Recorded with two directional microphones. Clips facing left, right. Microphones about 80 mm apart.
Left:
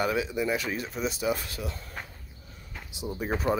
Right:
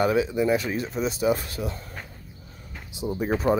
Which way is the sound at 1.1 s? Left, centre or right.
Right.